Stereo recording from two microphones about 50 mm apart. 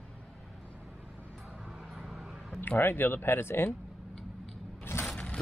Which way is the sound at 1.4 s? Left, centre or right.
Centre.